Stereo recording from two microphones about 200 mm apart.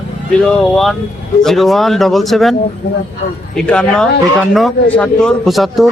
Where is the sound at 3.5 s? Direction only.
5° left (ahead or behind).